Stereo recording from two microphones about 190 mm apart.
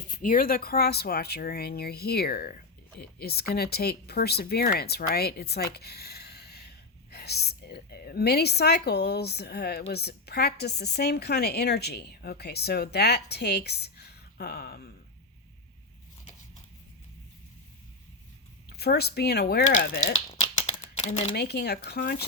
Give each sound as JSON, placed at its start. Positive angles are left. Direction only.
{"t": 0.1, "sound": "speech", "side_deg": 45}
{"t": 18.8, "sound": "speech", "side_deg": 60}
{"t": 20.3, "sound": "a sound", "side_deg": 35}
{"t": 21.3, "sound": "speech", "side_deg": 60}